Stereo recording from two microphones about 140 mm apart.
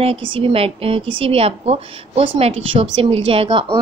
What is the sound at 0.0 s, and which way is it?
A woman's voice, 40° right (ahead or behind).